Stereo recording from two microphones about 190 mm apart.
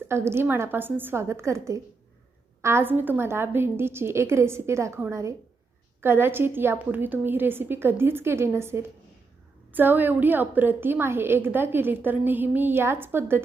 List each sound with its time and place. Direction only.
0.1 s a woman's voice: 15° right (ahead or behind)